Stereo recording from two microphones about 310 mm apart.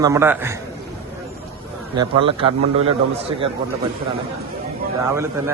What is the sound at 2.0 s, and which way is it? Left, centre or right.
Speech, centre.